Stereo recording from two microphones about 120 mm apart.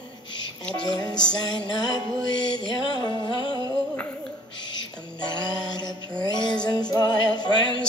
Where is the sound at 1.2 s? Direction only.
35° left (ahead or behind).